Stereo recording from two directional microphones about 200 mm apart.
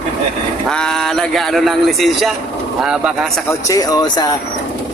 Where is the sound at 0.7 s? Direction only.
5° left (ahead or behind).